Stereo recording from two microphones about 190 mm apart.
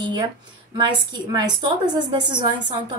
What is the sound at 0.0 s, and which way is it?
A woman's voice, 25° right (ahead or behind).